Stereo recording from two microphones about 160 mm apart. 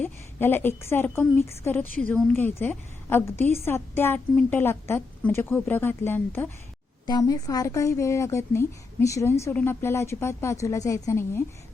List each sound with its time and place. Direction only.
0.0 s a woman's voice: 15° left (ahead or behind)
7.1 s speech: 25° left (ahead or behind)